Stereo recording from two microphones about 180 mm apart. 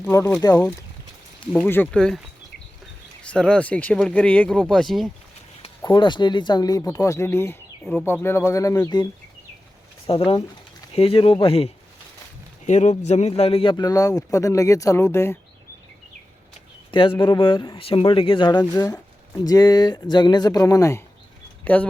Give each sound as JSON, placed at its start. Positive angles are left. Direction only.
{"t": 0.0, "sound": "speech", "side_deg": 15}
{"t": 3.2, "sound": "speech", "side_deg": 5}
{"t": 5.8, "sound": "speech", "side_deg": 25}
{"t": 10.1, "sound": "speech", "side_deg": 30}
{"t": 16.9, "sound": "speech", "side_deg": 25}